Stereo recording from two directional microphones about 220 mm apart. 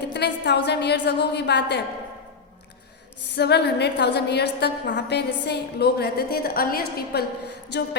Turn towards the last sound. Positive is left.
turn(degrees=50)  # may be behind; listen again after turning